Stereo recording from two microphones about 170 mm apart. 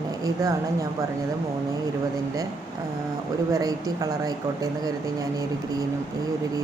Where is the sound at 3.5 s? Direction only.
20° right (ahead or behind).